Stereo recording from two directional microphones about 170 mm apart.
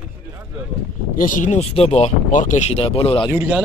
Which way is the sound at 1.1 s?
50° left (ahead or behind).